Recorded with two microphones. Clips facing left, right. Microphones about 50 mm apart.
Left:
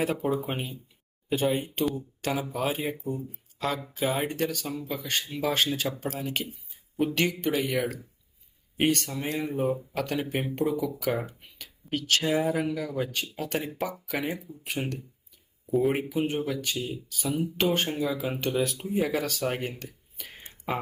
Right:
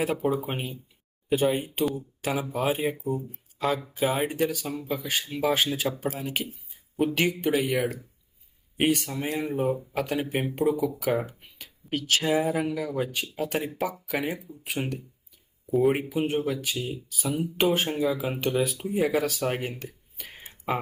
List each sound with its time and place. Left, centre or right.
0.0 s speech: centre